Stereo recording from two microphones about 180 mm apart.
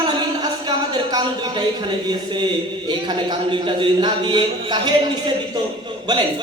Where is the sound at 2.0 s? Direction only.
25° right (ahead or behind).